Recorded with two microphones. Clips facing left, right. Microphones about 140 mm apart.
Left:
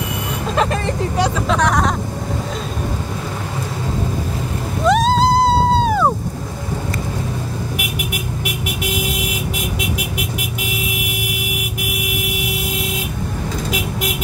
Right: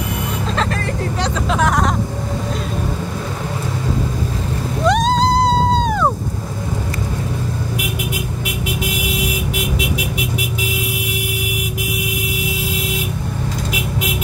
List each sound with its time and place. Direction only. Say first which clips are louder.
0.6 s vehicle: left 5 dB; 20° left (ahead or behind)
1.5 s a sound: right 2 dB; centre (ahead or behind)
4.8 s music: left 1 dB; centre (ahead or behind)